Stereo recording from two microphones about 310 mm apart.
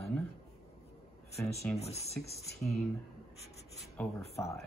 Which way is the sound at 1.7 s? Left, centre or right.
Centre.